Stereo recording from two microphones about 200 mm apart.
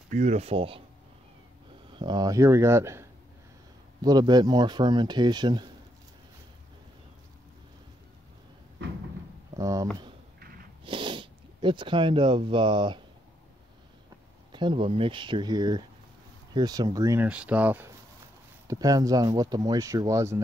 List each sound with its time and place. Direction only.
0.1 s speech: 35° right (ahead or behind)
1.9 s speech: 25° right (ahead or behind)
9.6 s a sound: 15° right (ahead or behind)
10.9 s speech: 25° right (ahead or behind)
14.5 s speech: 25° right (ahead or behind)